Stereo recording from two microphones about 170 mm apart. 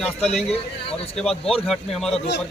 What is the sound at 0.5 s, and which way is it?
Speech, 35° left (ahead or behind).